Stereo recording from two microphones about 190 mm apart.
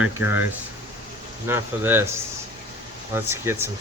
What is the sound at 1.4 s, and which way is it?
Speech, 10° right (ahead or behind).